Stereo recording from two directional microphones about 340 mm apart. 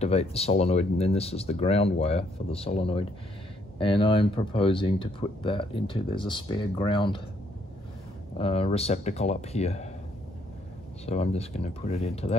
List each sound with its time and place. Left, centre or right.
0.0 s speech: centre
8.4 s speech: centre
11.1 s speech: centre